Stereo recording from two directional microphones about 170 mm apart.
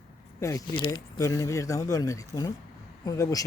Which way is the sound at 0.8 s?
25° left (ahead or behind).